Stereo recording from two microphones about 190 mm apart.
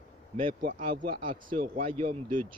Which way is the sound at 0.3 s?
45° right (ahead or behind).